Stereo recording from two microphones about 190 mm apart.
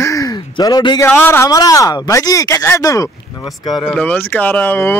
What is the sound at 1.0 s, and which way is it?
Speech, 10° left (ahead or behind).